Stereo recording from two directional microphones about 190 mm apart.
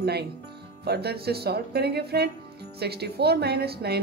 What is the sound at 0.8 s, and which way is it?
Speech, 55° right (ahead or behind).